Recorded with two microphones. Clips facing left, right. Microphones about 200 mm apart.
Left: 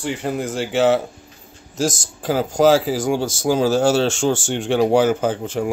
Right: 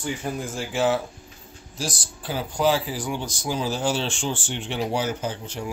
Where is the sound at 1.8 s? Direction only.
45° left (ahead or behind).